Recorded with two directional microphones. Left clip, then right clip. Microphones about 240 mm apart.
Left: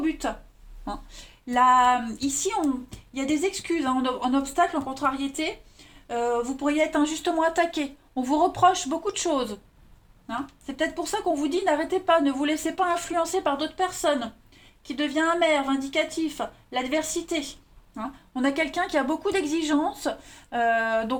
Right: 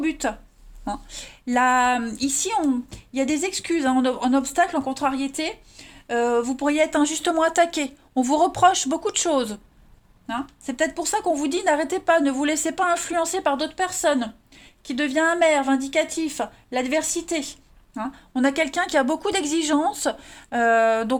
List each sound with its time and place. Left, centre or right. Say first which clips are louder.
0.0 s speech: right 3 dB; right